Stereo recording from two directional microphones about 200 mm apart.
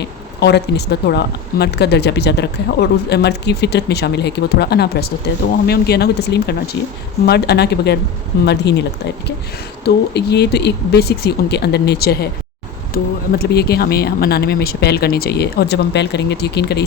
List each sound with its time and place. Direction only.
0.3 s speech: 55° left (ahead or behind)
13.4 s speech: 55° left (ahead or behind)